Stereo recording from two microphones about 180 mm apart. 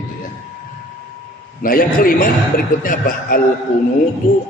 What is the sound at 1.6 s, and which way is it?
A man's voice, 50° left (ahead or behind).